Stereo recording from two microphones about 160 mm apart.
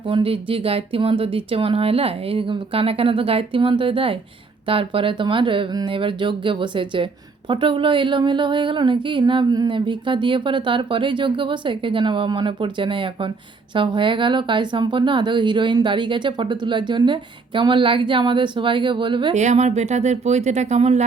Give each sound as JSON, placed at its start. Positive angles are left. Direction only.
{"t": 0.1, "sound": "speech", "side_deg": -35}
{"t": 19.3, "sound": "speech", "side_deg": -45}